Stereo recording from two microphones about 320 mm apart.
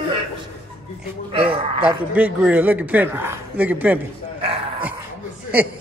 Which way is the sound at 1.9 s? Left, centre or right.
Centre.